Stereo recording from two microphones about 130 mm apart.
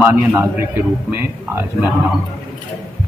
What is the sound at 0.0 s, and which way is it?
A man's voice, 15° right (ahead or behind).